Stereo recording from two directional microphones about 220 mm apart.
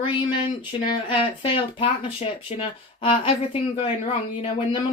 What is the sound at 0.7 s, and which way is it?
Speech, 20° left (ahead or behind).